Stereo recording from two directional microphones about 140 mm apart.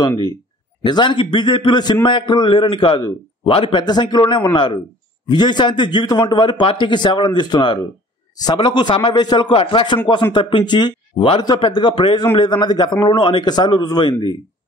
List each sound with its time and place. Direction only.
0.8 s a man's voice: 35° left (ahead or behind)